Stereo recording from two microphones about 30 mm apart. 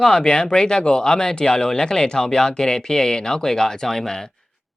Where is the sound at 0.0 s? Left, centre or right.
Left; by 4.2 s centre.